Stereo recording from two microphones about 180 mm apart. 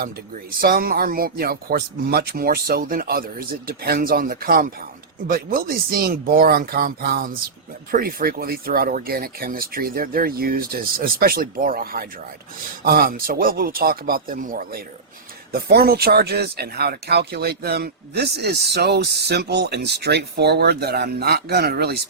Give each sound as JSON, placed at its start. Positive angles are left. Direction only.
{"t": 0.6, "sound": "speech", "side_deg": -55}